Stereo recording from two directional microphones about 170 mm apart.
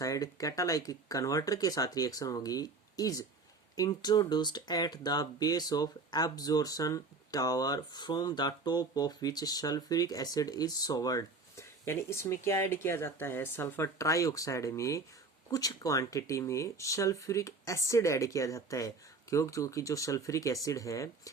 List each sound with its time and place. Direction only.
0.0 s speech: 20° left (ahead or behind)